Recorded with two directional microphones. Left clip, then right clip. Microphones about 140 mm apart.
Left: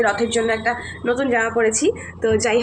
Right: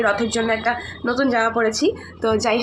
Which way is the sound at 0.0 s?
10° right (ahead or behind).